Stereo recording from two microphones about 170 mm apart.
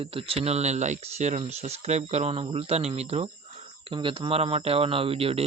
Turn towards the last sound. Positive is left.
turn(degrees=-35)  # may be behind; listen again after turning